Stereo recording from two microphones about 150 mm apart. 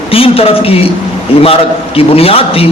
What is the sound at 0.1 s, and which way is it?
Speech, 40° left (ahead or behind).